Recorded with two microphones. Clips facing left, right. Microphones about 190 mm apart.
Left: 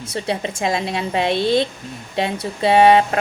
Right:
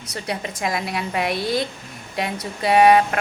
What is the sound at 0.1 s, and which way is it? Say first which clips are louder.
A woman's voice: left 5 dB; 25° left (ahead or behind).